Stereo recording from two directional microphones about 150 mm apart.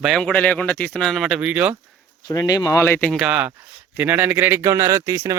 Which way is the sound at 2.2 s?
25° left (ahead or behind).